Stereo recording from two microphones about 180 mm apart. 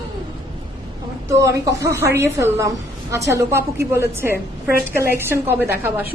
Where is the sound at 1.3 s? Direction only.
15° right (ahead or behind).